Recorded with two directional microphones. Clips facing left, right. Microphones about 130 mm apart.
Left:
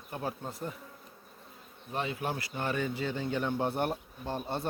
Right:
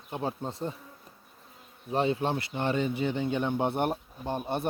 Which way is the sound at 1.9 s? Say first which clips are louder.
Right 7 dB; 30° right (ahead or behind).